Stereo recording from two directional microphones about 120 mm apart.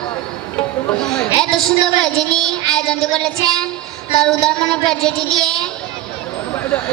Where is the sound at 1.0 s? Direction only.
5° left (ahead or behind).